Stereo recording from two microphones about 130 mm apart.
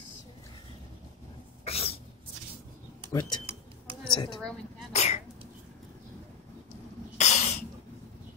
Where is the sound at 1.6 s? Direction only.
50° left (ahead or behind).